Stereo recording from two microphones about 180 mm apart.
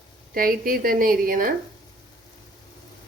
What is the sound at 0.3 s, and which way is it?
A woman's voice, 50° right (ahead or behind).